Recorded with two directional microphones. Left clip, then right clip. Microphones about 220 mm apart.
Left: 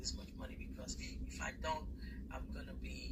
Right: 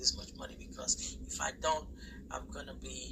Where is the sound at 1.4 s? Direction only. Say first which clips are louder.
Right 8 dB; 15° right (ahead or behind).